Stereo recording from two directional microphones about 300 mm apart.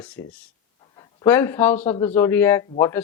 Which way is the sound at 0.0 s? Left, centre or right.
Centre.